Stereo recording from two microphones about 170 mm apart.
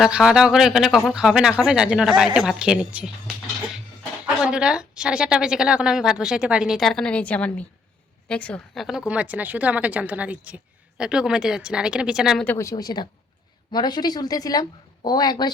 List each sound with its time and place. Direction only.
0.0 s a woman's voice: 5° right (ahead or behind)
4.4 s a woman's voice: 5° right (ahead or behind)
12.5 s speech: 15° left (ahead or behind)